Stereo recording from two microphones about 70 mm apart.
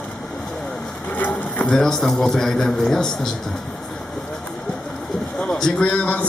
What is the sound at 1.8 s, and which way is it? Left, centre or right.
A man's voice, centre.